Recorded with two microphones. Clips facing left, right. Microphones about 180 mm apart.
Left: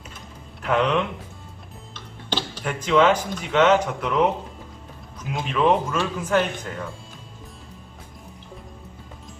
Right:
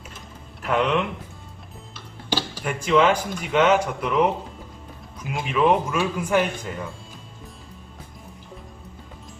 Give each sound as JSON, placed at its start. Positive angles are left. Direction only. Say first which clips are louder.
{"t": 0.6, "sound": "speech", "louder": "left 1 dB", "side_deg": -5}